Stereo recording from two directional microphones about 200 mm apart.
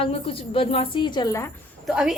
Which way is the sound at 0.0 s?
30° left (ahead or behind).